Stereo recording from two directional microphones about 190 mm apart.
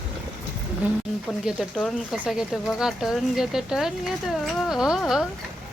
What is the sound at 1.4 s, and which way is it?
Speech, 5° right (ahead or behind).